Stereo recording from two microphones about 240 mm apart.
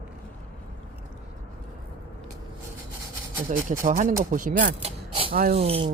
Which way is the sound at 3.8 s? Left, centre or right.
Right.